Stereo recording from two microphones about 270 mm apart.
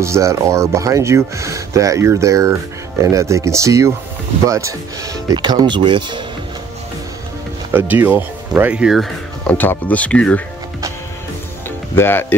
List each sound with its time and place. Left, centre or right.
0.0 s speech: centre
7.7 s speech: centre
11.9 s speech: centre